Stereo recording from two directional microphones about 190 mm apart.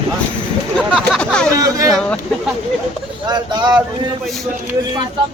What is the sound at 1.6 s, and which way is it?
Speech, 20° right (ahead or behind).